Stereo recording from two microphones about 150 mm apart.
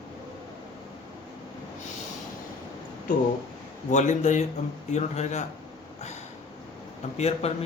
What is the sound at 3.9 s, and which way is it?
A man's voice, 55° left (ahead or behind).